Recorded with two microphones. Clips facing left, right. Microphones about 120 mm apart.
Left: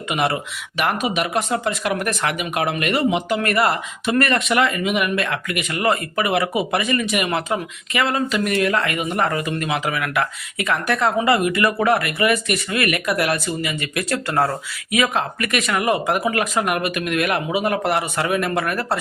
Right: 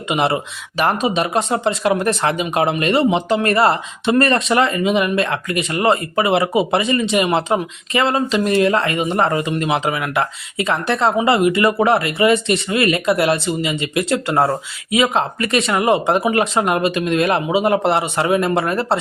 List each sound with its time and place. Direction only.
0.1 s speech: 25° right (ahead or behind)